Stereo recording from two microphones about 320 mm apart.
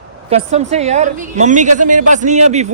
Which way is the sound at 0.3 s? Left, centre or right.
Right.